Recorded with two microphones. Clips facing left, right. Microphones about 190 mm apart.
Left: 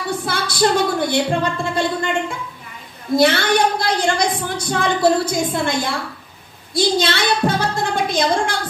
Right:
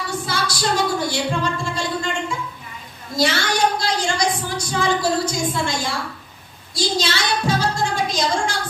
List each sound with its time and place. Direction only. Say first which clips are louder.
0.2 s a woman's voice: left 8 dB; 55° left (ahead or behind)